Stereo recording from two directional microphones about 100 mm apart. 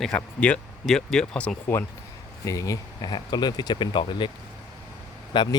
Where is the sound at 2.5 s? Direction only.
35° left (ahead or behind); by 4.3 s 50° left (ahead or behind).